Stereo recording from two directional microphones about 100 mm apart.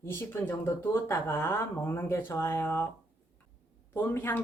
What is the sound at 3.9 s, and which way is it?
Speech, 20° left (ahead or behind).